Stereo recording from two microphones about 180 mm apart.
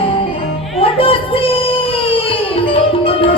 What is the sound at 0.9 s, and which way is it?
Child singing, 30° left (ahead or behind).